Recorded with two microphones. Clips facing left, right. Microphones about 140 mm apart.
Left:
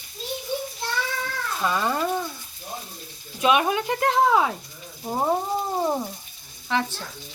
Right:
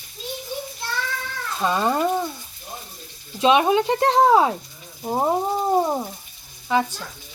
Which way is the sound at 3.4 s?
25° right (ahead or behind).